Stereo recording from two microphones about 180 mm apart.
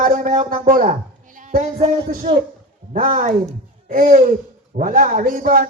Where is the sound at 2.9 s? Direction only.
50° right (ahead or behind).